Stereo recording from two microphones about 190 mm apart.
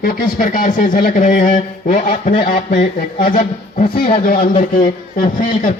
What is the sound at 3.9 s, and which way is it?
Speech, 30° left (ahead or behind).